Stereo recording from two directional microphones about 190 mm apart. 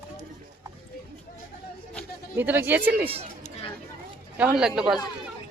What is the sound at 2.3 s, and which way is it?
Speech, 10° right (ahead or behind).